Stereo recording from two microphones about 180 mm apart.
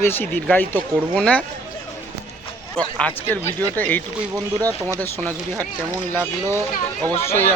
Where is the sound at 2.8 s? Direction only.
5° left (ahead or behind).